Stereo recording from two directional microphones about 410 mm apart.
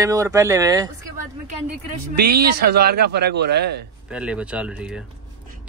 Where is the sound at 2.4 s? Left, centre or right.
Right.